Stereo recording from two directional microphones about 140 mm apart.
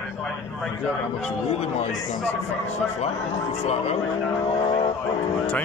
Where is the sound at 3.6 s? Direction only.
50° left (ahead or behind).